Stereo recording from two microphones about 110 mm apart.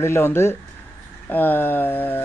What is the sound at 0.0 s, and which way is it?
Speech, 20° left (ahead or behind).